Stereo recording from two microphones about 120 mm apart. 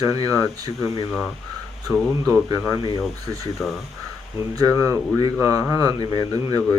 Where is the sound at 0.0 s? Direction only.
25° right (ahead or behind).